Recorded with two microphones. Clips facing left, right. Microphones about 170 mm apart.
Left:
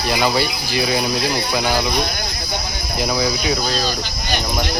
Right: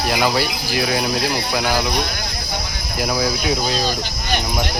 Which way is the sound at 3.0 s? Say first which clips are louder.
Even; 5° right (ahead or behind).